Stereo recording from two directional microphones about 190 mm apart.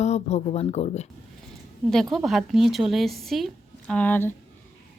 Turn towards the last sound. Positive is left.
turn(degrees=10)  # may be behind; listen again after turning